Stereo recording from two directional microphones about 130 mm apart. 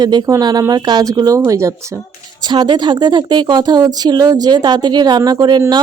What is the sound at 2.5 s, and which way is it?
A woman's voice, 35° right (ahead or behind).